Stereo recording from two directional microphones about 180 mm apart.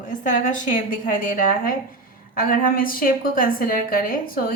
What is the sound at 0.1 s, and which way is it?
A woman's voice, 45° left (ahead or behind).